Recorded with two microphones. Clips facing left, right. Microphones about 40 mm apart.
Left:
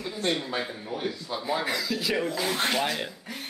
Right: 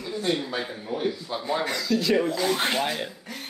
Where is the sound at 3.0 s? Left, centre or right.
Centre.